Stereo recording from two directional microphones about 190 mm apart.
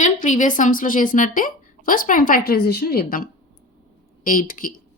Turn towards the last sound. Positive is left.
turn(degrees=45)  # may be behind; listen again after turning